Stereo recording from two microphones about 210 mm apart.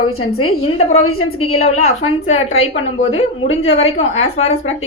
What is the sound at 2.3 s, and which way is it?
Speech, 75° left (ahead or behind).